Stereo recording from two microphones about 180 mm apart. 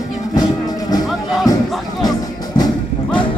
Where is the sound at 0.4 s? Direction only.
20° left (ahead or behind).